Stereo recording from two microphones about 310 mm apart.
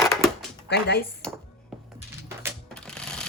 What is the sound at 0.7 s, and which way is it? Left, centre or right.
Speech, left.